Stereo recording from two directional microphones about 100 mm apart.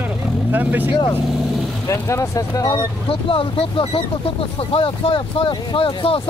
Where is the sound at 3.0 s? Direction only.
65° left (ahead or behind).